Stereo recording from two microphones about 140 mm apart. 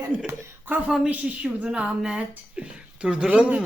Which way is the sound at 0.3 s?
15° right (ahead or behind).